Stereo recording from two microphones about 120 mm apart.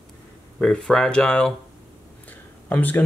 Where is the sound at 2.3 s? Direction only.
15° left (ahead or behind).